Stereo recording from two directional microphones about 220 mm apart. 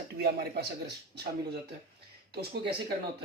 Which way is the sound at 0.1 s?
45° right (ahead or behind).